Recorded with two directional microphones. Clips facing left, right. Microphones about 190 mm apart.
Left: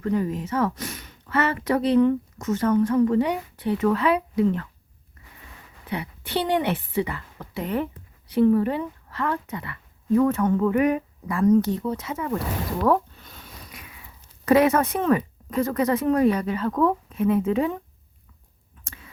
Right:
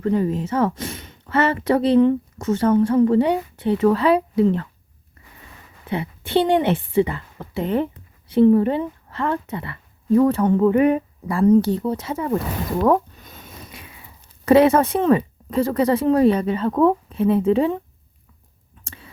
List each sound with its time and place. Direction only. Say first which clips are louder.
0.0 s speech: right 4 dB; 30° right (ahead or behind)
5.8 s a woman's voice: right 5 dB; 25° right (ahead or behind)
18.9 s a sound: right 3 dB; 30° right (ahead or behind)